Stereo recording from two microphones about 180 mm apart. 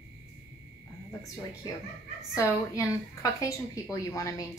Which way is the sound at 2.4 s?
15° left (ahead or behind).